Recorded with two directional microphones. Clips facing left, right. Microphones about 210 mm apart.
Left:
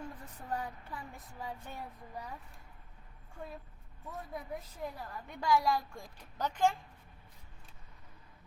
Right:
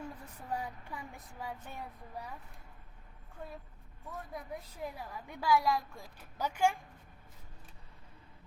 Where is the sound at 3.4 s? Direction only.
5° left (ahead or behind).